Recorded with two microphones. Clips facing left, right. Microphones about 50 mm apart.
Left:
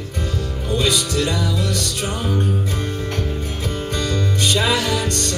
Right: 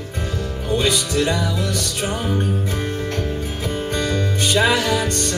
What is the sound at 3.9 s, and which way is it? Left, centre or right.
Music, centre.